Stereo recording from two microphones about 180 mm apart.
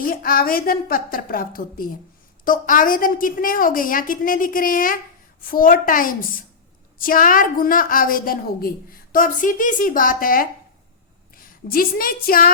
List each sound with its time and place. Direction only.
0.0 s a woman's voice: 50° left (ahead or behind)